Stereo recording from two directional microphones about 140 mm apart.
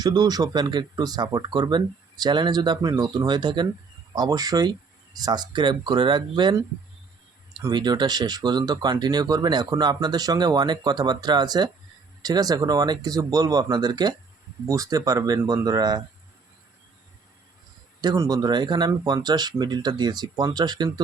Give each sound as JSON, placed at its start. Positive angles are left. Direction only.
{"t": 0.0, "sound": "speech", "side_deg": -30}
{"t": 7.7, "sound": "speech", "side_deg": -30}
{"t": 18.0, "sound": "speech", "side_deg": -25}